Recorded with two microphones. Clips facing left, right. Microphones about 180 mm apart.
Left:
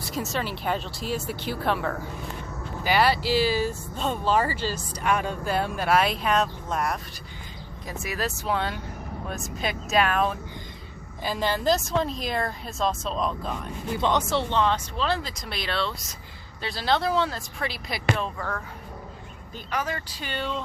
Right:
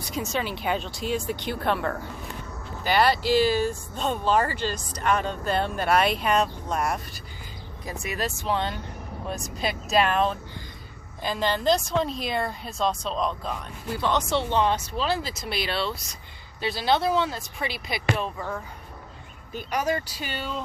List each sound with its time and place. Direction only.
0.0 s speech: centre (ahead or behind)
13.9 s speech: 20° left (ahead or behind)
14.2 s speech: centre (ahead or behind)
14.5 s speech: 10° right (ahead or behind)
18.3 s speech: 10° right (ahead or behind)